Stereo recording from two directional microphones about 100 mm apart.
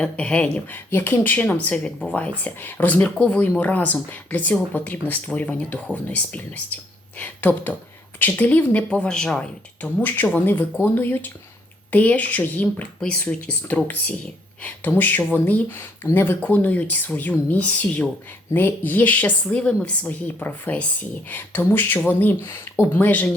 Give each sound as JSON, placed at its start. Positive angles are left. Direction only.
{"t": 0.0, "sound": "speech", "side_deg": 10}
{"t": 0.9, "sound": "speech", "side_deg": 20}